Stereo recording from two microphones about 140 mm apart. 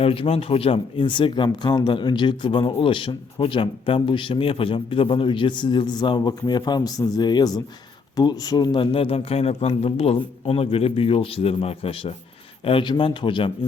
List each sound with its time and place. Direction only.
0.0 s a man's voice: 45° left (ahead or behind)